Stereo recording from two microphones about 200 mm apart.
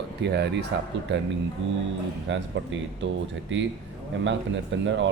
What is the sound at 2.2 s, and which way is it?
Speech, 65° right (ahead or behind).